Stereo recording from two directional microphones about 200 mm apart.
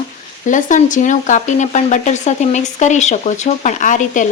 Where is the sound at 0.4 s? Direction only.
40° left (ahead or behind).